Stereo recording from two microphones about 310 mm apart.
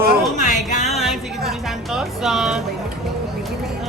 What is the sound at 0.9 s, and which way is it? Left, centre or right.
Music, centre.